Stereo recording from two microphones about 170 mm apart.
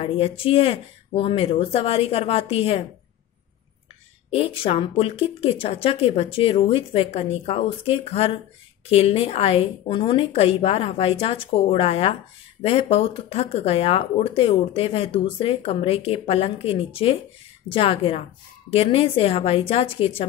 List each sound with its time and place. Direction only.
0.0 s speech: 35° left (ahead or behind)
4.3 s speech: 35° left (ahead or behind)